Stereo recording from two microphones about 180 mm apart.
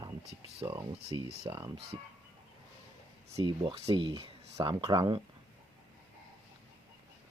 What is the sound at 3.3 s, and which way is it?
Speech, 30° right (ahead or behind).